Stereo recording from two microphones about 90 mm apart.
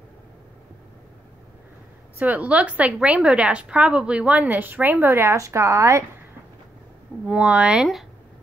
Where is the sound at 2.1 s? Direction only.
15° right (ahead or behind); by 6.0 s 35° right (ahead or behind).